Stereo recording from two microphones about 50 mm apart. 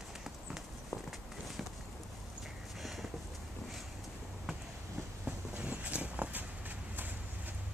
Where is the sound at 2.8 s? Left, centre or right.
Centre.